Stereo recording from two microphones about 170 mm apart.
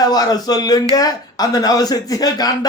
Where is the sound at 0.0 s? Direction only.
25° left (ahead or behind).